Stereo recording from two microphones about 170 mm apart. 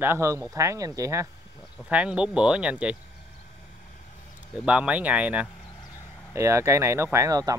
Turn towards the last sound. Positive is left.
turn(degrees=-20)  # may be behind; listen again after turning